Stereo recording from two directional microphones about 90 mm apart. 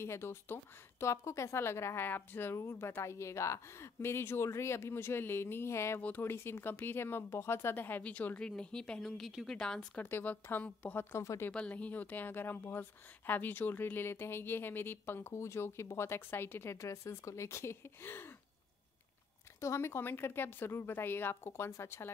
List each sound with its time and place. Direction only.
0.0 s a woman's voice: 30° left (ahead or behind)
5.9 s a woman's voice: 20° left (ahead or behind); by 9.6 s centre (ahead or behind)
9.6 s speech: 10° left (ahead or behind)
10.0 s a woman's voice: 20° left (ahead or behind)
11.5 s a woman's voice: 15° left (ahead or behind)
19.6 s a woman's voice: 30° left (ahead or behind)